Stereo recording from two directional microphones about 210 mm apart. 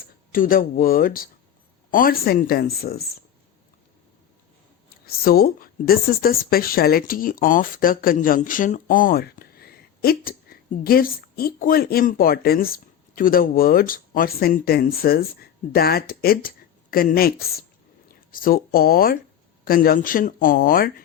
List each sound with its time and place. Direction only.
0.3 s speech: 40° left (ahead or behind)
5.0 s speech: 45° left (ahead or behind)